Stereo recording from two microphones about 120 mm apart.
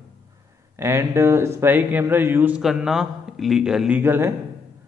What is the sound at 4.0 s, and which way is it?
Speech, 20° right (ahead or behind).